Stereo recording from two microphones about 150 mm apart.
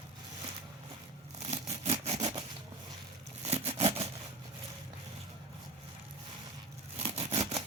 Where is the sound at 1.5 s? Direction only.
45° right (ahead or behind).